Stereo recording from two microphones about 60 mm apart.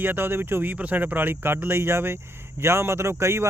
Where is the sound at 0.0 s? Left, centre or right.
Right.